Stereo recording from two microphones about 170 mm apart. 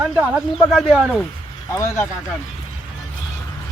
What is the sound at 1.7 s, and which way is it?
Speech, 15° left (ahead or behind).